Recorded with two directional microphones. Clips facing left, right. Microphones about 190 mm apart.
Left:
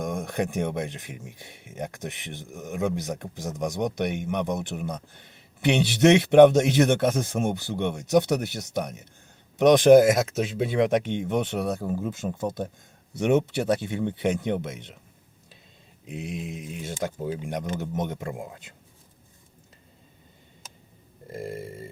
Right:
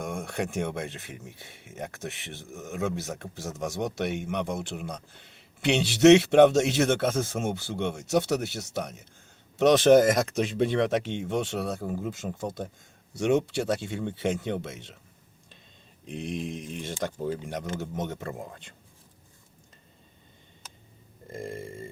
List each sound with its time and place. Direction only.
0.0 s speech: 15° left (ahead or behind)
16.0 s speech: 5° left (ahead or behind)
21.3 s a sound: 5° left (ahead or behind)